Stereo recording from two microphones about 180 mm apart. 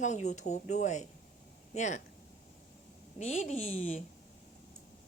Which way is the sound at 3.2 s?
40° left (ahead or behind).